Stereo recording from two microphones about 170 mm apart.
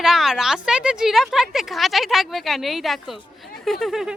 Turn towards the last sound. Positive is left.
turn(degrees=0)  # may be behind; listen again after turning